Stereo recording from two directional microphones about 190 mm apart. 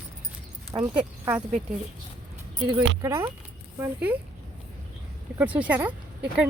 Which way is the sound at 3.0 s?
15° right (ahead or behind).